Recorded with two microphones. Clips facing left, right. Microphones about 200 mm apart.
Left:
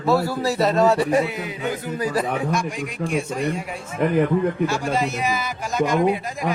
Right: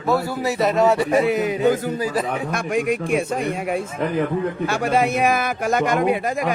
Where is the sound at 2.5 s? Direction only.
60° right (ahead or behind).